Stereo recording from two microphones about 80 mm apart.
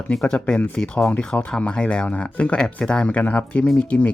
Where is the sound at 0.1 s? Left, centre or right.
Centre.